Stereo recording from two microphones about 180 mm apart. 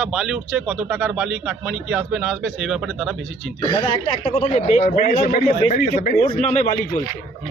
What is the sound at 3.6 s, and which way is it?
A man's voice, 30° left (ahead or behind).